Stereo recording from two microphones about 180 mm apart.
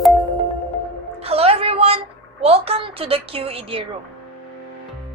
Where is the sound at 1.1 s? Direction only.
35° right (ahead or behind).